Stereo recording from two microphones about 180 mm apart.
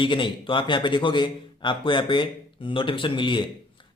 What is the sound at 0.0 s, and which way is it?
Speech, 25° left (ahead or behind).